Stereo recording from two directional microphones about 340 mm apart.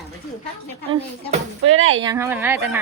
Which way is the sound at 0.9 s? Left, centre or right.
Centre.